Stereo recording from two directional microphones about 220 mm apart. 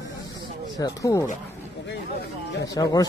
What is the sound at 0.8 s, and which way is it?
Speech, 15° left (ahead or behind).